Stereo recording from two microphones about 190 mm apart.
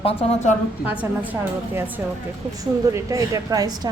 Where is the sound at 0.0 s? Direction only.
30° left (ahead or behind).